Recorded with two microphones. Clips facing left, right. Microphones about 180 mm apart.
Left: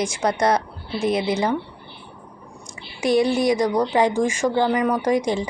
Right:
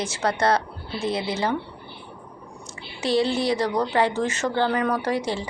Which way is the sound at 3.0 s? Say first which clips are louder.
Left 4 dB; 15° left (ahead or behind).